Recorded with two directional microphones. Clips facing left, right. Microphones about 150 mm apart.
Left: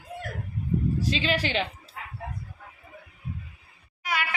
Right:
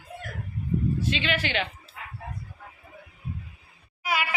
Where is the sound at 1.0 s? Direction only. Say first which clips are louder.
Left 1 dB; 35° left (ahead or behind).